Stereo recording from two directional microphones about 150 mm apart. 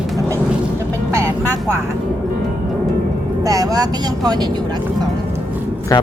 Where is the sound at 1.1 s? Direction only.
20° right (ahead or behind).